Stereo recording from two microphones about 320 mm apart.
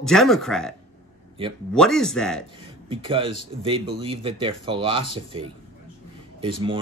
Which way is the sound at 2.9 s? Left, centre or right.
Centre.